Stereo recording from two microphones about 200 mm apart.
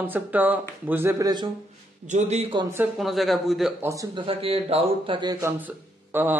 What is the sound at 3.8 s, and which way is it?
A man's voice, 15° right (ahead or behind).